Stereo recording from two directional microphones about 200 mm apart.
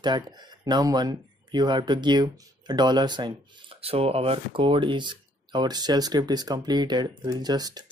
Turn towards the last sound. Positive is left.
turn(degrees=-20)  # may be behind; listen again after turning